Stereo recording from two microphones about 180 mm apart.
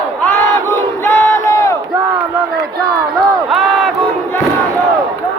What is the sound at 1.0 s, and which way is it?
Battle cry, 15° left (ahead or behind).